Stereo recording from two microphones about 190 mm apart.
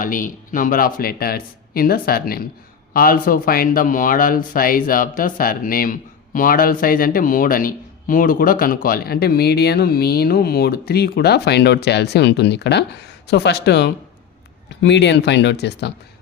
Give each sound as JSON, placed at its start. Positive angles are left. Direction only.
{"t": 0.0, "sound": "speech", "side_deg": 45}